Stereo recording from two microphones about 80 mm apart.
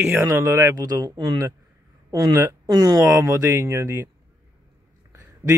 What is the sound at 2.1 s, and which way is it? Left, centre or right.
Speech, right.